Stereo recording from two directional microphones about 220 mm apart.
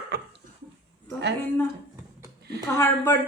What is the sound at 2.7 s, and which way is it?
Speech, 10° left (ahead or behind).